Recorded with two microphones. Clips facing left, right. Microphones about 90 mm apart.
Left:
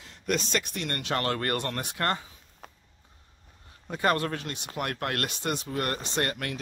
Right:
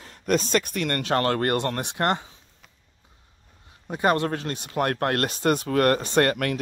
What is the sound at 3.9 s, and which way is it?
Speech, 20° right (ahead or behind).